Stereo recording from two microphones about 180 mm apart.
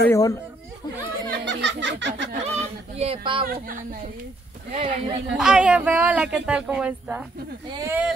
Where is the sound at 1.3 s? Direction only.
80° right.